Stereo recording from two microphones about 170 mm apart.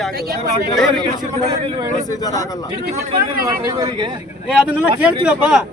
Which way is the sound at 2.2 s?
20° left (ahead or behind).